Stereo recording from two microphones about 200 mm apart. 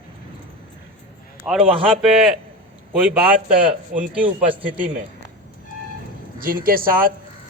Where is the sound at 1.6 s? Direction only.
25° right (ahead or behind).